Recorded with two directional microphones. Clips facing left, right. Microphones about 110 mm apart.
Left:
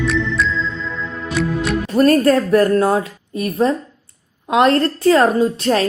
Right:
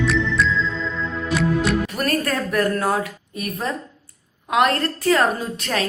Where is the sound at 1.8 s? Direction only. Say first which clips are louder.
Left 10 dB; 30° left (ahead or behind).